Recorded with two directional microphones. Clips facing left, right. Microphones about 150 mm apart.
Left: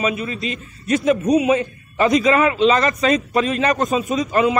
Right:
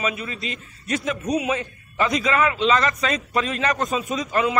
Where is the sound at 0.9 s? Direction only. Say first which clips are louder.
Left 8 dB; 15° left (ahead or behind).